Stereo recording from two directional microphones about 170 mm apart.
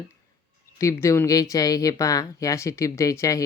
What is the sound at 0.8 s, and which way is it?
Speech, 15° left (ahead or behind).